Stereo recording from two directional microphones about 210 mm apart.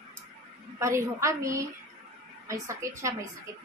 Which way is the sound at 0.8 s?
15° right (ahead or behind).